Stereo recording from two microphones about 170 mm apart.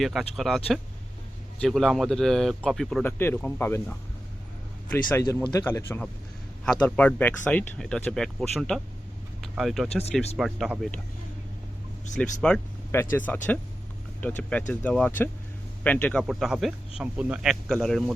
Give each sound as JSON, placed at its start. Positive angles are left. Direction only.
{"t": 0.0, "sound": "speech", "side_deg": 0}
{"t": 5.2, "sound": "speech", "side_deg": 25}
{"t": 12.1, "sound": "speech", "side_deg": 5}
{"t": 16.2, "sound": "speech", "side_deg": -5}